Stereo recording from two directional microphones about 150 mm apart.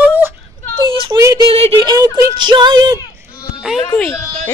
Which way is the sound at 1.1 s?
20° right (ahead or behind).